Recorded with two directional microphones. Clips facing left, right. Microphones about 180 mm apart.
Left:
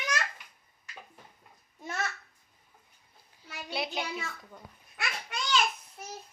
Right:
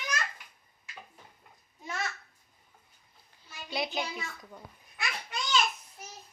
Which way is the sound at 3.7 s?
Centre (ahead or behind).